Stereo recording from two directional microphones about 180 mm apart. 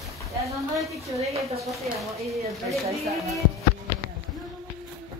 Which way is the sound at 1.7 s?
Centre (ahead or behind).